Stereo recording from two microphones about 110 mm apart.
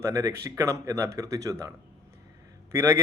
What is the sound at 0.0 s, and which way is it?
Speech, 30° right (ahead or behind).